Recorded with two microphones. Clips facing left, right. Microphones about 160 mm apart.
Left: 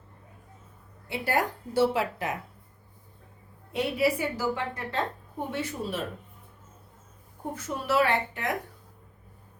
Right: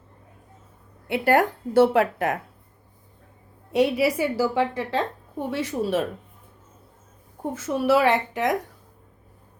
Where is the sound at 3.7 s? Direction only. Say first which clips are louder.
Right 6 dB; 85° right.